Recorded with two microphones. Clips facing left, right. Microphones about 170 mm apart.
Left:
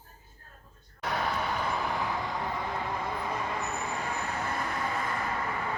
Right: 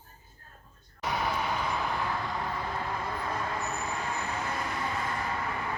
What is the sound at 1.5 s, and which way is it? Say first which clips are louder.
Vehicle: even; centre (ahead or behind).